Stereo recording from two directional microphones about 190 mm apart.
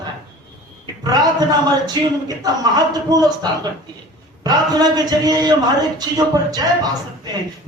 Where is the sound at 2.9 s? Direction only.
20° right (ahead or behind).